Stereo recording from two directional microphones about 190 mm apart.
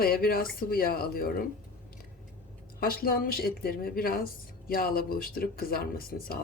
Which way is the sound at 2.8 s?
50° left (ahead or behind).